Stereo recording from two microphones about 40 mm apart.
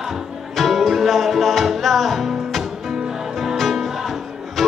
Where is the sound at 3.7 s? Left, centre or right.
Centre.